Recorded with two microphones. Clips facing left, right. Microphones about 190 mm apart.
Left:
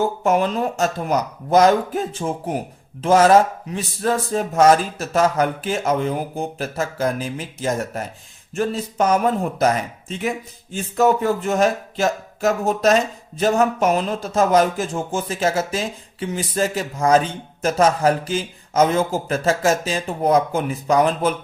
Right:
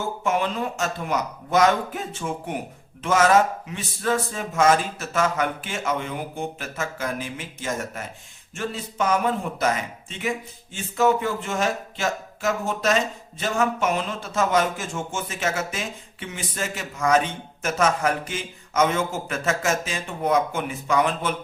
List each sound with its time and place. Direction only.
0.2 s speech: 40° left (ahead or behind)